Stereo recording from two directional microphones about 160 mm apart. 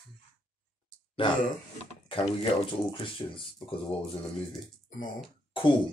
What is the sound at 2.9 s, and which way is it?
Speech, 30° left (ahead or behind).